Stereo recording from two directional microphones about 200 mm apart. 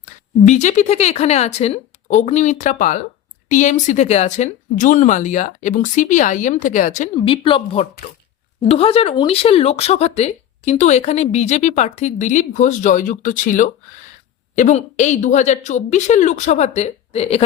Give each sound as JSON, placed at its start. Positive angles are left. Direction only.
{"t": 0.0, "sound": "speech", "side_deg": 35}
{"t": 7.2, "sound": "speech", "side_deg": 25}